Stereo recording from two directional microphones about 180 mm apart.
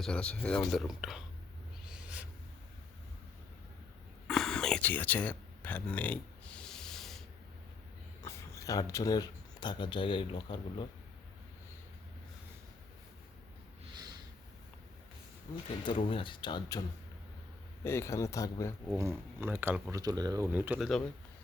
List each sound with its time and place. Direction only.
0.0 s speech: 5° left (ahead or behind)
1.9 s a sound: 5° right (ahead or behind)
4.3 s a sound: centre (ahead or behind)
8.2 s speech: 15° left (ahead or behind)
15.8 s speech: 30° left (ahead or behind)
17.8 s speech: 15° left (ahead or behind)
18.9 s speech: 15° right (ahead or behind)